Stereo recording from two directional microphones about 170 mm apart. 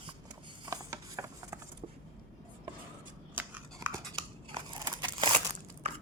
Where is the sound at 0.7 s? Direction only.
20° right (ahead or behind).